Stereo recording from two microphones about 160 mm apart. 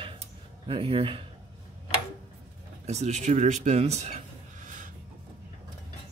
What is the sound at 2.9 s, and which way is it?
Speech, 45° right (ahead or behind).